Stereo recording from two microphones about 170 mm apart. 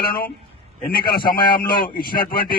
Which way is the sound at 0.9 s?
60° left (ahead or behind).